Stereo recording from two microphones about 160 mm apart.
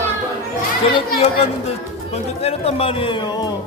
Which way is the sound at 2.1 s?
40° left (ahead or behind).